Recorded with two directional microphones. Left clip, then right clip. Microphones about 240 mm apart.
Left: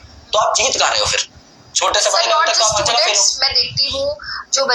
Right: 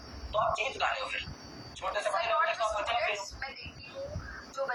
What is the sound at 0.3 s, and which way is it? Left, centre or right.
Speech, left.